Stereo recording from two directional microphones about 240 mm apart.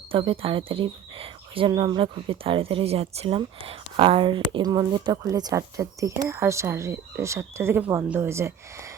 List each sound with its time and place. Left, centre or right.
0.1 s speech: right